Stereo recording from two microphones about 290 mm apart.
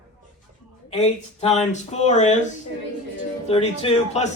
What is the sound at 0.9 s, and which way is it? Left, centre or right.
A man's voice, left.